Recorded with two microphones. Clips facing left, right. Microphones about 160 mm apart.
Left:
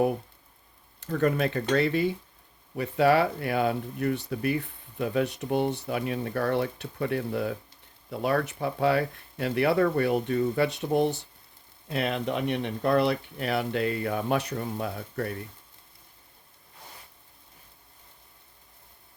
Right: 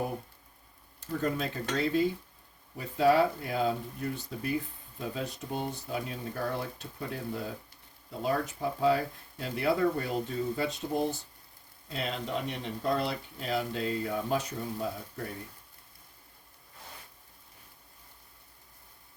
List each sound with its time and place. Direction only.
0.9 s speech: 70° left (ahead or behind)